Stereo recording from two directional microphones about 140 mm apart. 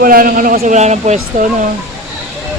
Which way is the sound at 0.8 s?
55° right (ahead or behind).